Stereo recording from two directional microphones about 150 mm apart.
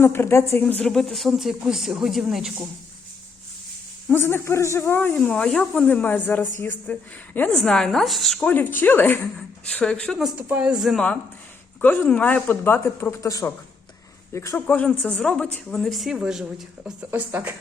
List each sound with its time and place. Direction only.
0.0 s speech: 15° left (ahead or behind)
0.6 s speech: 5° left (ahead or behind)
4.1 s speech: 15° left (ahead or behind); by 11.0 s 5° right (ahead or behind)
11.8 s speech: 10° left (ahead or behind)
14.5 s speech: 10° left (ahead or behind); by 17.5 s 10° right (ahead or behind)